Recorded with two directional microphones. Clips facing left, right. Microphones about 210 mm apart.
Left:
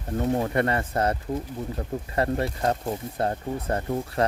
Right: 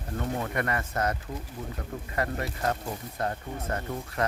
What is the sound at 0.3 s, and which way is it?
Speech, 30° left (ahead or behind).